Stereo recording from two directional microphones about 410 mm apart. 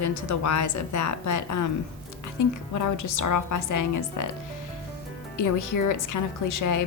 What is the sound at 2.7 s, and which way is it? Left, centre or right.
A woman's voice, left.